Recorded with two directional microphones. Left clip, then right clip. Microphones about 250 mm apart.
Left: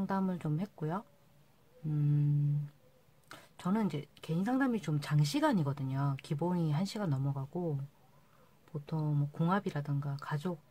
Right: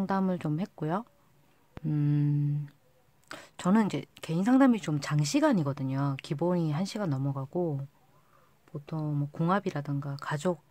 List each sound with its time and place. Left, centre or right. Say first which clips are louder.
0.0 s speech: right 6 dB; right
1.9 s mantra: right 6 dB; right
3.3 s speech: right 8 dB; right
8.8 s speech: right 3 dB; right